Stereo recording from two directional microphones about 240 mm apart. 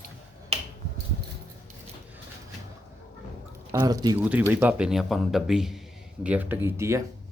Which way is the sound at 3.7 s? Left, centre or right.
Centre.